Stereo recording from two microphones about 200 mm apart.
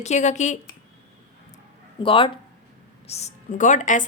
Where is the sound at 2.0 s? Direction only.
25° left (ahead or behind).